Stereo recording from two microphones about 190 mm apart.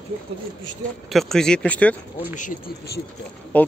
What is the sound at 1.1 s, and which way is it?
Speech, centre (ahead or behind).